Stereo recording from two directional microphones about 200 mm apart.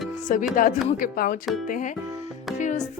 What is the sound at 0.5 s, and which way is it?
Speech, 40° left (ahead or behind).